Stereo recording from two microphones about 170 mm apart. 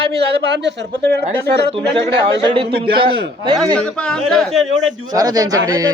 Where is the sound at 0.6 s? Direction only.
90° right.